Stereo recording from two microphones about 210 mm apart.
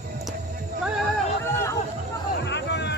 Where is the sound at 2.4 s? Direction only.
55° left (ahead or behind).